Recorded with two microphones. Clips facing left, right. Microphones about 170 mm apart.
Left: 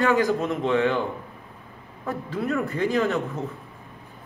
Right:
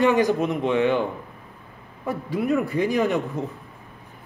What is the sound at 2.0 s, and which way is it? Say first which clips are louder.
Speech: right 3 dB; 15° right (ahead or behind).